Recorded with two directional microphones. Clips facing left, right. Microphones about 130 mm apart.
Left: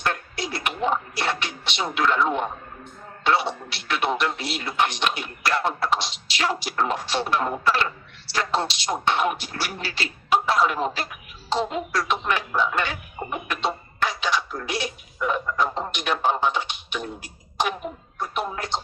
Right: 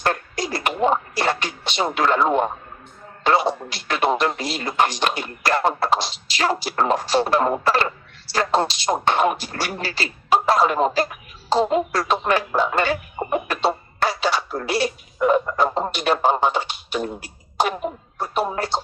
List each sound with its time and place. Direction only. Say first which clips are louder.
0.0 s radio: right 4 dB; 40° right (ahead or behind)
3.2 s speech: right 4 dB; 40° right (ahead or behind)
18.2 s speech: right 5 dB; 35° right (ahead or behind)